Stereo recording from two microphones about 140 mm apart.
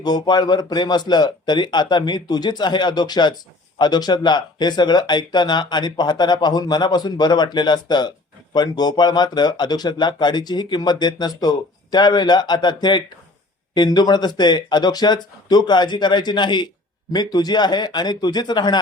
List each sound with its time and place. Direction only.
0.0 s speech: 30° left (ahead or behind)